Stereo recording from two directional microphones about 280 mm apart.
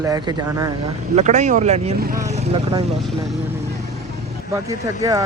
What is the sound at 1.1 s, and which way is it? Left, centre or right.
Speech, right.